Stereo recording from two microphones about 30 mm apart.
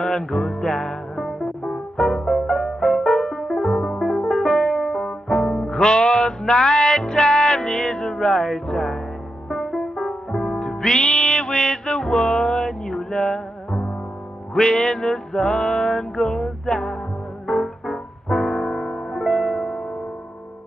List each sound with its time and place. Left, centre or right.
0.0 s music: left
2.0 s brass instrument: left
3.5 s music: centre
10.6 s music: left; by 19.2 s centre
19.2 s music: left
19.6 s music: centre